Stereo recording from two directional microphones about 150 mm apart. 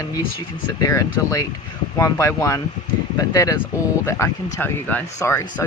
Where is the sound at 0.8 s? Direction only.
20° left (ahead or behind).